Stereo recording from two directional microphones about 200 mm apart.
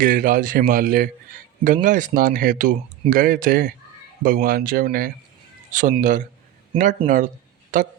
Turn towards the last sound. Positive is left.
turn(degrees=-40)  # may be behind; listen again after turning